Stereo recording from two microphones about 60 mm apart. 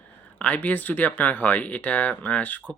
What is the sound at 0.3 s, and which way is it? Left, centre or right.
Speech, left.